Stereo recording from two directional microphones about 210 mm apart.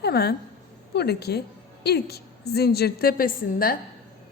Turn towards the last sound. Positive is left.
turn(degrees=45)  # may be behind; listen again after turning